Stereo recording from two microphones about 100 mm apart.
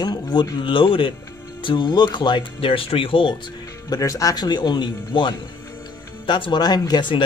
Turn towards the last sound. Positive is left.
turn(degrees=50)  # may be behind; listen again after turning